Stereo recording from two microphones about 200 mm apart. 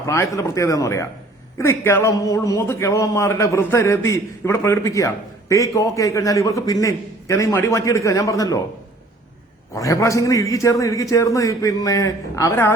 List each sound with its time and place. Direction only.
0.0 s a man's voice: 15° left (ahead or behind)
9.7 s a man's voice: 15° left (ahead or behind)